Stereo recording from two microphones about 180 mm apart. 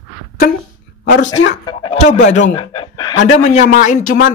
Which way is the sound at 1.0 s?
80° left.